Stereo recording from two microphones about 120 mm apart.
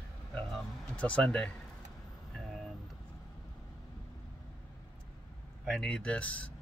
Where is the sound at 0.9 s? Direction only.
10° left (ahead or behind).